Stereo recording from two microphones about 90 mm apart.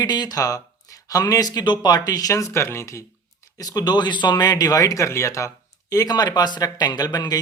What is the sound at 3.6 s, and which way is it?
Speech, 45° left (ahead or behind).